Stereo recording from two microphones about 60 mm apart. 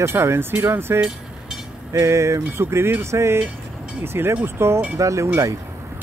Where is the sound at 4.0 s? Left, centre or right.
Right.